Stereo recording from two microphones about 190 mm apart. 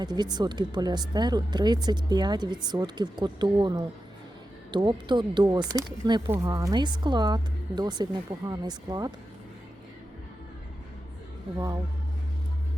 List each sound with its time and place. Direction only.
0.0 s speech: 20° right (ahead or behind)
11.5 s speech: 20° right (ahead or behind)